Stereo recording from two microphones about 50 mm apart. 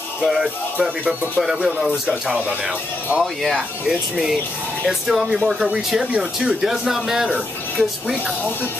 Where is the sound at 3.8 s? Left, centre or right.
Centre.